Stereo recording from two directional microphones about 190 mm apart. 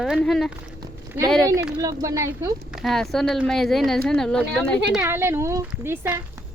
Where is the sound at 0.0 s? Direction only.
Centre (ahead or behind).